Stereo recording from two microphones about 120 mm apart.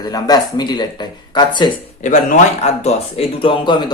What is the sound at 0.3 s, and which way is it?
Speech, 35° left (ahead or behind).